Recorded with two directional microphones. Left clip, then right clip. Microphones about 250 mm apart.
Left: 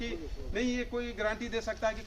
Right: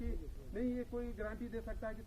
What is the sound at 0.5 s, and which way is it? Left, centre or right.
Speech, centre.